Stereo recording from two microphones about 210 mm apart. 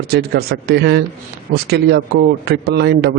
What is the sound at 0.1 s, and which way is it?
A man's voice, 50° right (ahead or behind).